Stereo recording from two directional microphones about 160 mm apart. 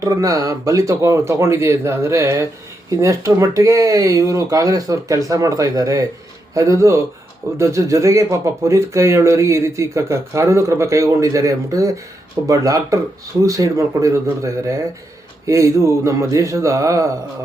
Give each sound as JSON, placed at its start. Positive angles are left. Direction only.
{"t": 0.0, "sound": "speech", "side_deg": -20}